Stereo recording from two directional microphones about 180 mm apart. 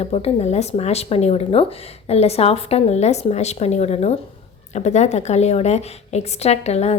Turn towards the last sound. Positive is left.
turn(degrees=35)  # may be behind; listen again after turning